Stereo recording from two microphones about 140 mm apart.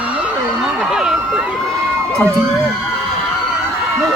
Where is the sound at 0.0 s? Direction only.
10° right (ahead or behind).